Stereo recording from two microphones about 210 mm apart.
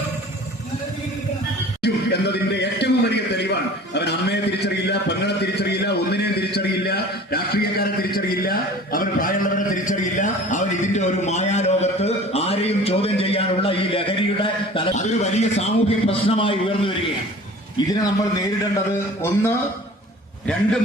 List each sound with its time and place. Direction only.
1.8 s a sound: 55° left (ahead or behind)
3.9 s a man's voice: 55° left (ahead or behind); by 17.9 s 20° left (ahead or behind)
19.2 s speech: 15° left (ahead or behind)